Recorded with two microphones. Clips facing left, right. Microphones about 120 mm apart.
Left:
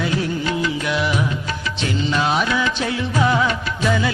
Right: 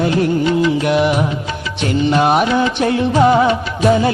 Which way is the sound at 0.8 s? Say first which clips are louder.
Right 7 dB; 55° right (ahead or behind).